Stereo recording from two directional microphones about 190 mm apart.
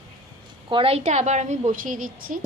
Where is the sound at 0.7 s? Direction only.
30° right (ahead or behind).